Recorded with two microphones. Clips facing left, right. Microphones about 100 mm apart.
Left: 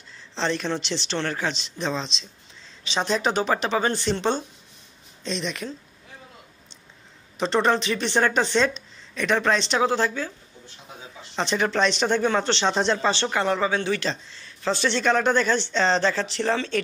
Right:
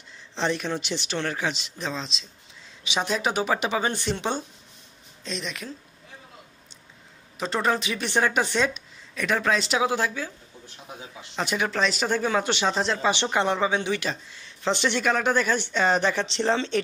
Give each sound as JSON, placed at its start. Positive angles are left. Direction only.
{"t": 0.4, "sound": "speech", "side_deg": -10}
{"t": 7.3, "sound": "speech", "side_deg": -5}
{"t": 11.3, "sound": "speech", "side_deg": -5}
{"t": 13.1, "sound": "speech", "side_deg": -15}